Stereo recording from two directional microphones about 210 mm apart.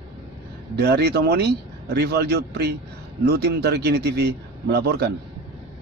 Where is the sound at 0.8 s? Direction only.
50° right (ahead or behind).